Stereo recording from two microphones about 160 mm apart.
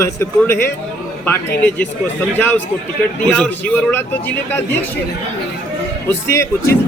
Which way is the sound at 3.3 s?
5° left (ahead or behind).